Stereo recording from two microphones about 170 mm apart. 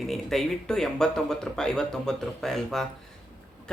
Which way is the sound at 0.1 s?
Centre (ahead or behind).